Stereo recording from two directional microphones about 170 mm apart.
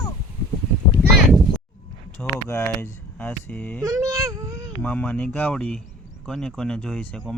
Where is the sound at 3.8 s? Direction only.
20° right (ahead or behind).